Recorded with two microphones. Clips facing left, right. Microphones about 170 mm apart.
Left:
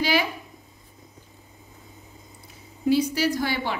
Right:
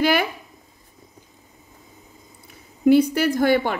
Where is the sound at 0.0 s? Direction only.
55° right (ahead or behind).